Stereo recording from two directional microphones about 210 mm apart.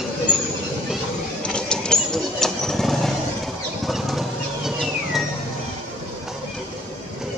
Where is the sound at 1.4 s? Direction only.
5° left (ahead or behind).